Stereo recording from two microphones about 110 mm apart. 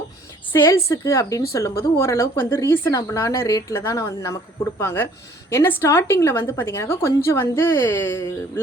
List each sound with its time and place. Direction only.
0.5 s a woman's voice: 25° left (ahead or behind)